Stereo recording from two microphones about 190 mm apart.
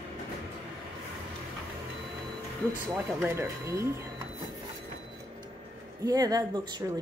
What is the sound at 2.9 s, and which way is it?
Speech, 10° right (ahead or behind).